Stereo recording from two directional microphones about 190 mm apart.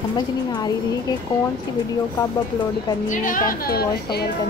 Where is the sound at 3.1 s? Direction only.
45° left (ahead or behind).